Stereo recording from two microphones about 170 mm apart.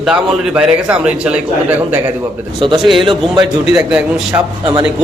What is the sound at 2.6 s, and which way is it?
Speech, 30° right (ahead or behind).